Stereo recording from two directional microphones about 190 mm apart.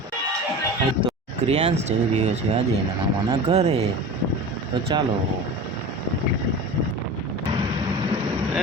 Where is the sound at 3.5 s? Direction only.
35° right (ahead or behind).